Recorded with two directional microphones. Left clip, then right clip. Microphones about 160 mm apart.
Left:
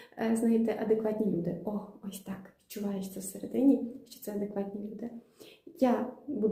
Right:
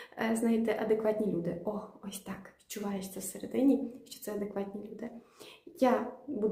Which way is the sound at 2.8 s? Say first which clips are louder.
Left 1 dB; 25° right (ahead or behind).